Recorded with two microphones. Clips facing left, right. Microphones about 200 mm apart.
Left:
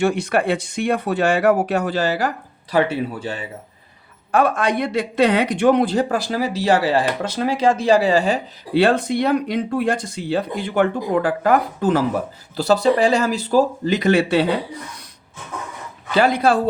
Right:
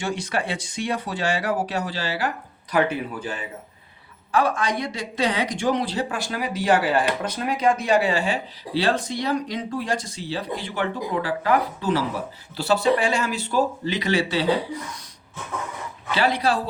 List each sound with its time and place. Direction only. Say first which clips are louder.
0.0 s speech: left 8 dB; 60° left (ahead or behind); by 2.3 s 45° left (ahead or behind)
2.7 s speech: left 3 dB; 30° left (ahead or behind)
4.3 s speech: left 4 dB; 55° left (ahead or behind); by 8.4 s 40° left (ahead or behind)
8.7 s speech: left 7 dB; 55° left (ahead or behind)
16.1 s speech: left 6 dB; 50° left (ahead or behind)